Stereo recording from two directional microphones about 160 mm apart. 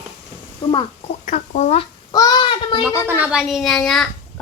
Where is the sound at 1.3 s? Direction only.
50° left (ahead or behind).